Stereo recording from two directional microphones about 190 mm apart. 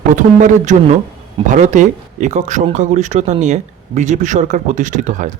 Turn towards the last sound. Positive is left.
turn(degrees=-40)  # may be behind; listen again after turning